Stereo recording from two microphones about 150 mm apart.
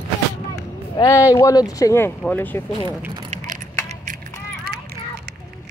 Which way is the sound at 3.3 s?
60° right (ahead or behind).